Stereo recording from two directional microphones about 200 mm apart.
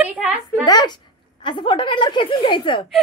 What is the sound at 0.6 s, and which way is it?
A woman's voice, 20° left (ahead or behind).